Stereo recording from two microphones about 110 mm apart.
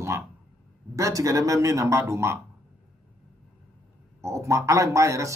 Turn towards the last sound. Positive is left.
turn(degrees=-30)  # may be behind; listen again after turning